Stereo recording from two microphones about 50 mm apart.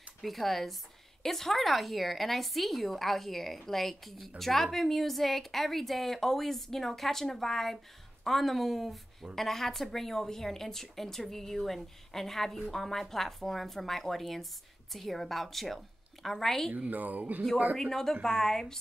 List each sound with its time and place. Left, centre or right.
0.2 s speech: centre
16.7 s speech: right
17.7 s speech: centre